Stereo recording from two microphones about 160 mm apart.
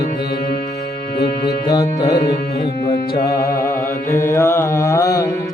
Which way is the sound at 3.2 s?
20° left (ahead or behind).